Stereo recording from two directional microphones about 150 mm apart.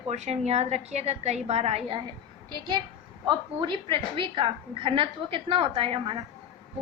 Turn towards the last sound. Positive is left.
turn(degrees=-35)  # may be behind; listen again after turning